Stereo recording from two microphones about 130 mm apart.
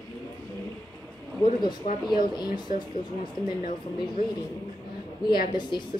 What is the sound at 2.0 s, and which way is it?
Speech, 35° left (ahead or behind).